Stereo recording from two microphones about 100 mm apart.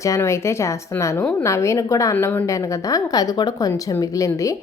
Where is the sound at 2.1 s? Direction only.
20° left (ahead or behind).